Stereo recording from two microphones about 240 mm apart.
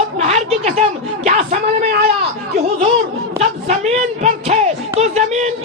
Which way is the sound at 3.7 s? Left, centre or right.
Right.